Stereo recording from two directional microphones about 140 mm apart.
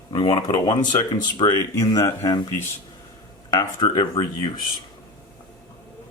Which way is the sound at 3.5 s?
30° left (ahead or behind).